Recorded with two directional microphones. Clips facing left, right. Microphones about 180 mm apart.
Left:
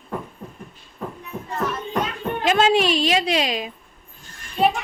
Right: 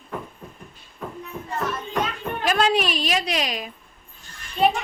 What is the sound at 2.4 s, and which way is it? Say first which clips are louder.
A woman's voice: left 3 dB; 25° left (ahead or behind).